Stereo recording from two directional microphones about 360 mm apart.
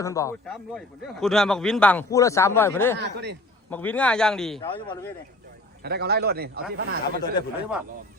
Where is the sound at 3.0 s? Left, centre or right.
Right.